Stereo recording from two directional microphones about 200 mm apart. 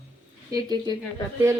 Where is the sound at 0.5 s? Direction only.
20° right (ahead or behind).